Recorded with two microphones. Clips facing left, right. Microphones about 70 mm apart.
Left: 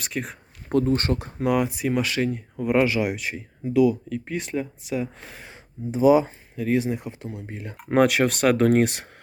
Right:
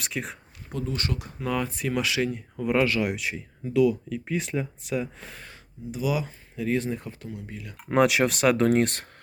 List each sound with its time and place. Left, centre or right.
0.0 s speech: centre
0.7 s speech: left
1.5 s speech: centre
5.9 s speech: left
6.6 s speech: centre; by 7.8 s left
7.9 s speech: centre